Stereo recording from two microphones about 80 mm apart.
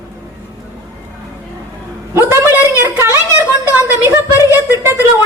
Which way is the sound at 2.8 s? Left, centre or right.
Right.